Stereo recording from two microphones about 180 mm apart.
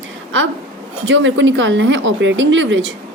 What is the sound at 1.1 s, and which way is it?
A woman's voice, 90° right.